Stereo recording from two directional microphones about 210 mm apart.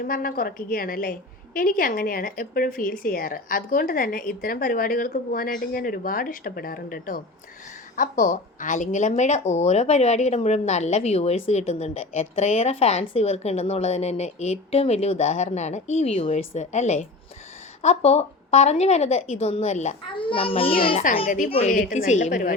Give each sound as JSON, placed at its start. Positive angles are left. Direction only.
{"t": 0.0, "sound": "speech", "side_deg": 45}
{"t": 21.2, "sound": "speech", "side_deg": 40}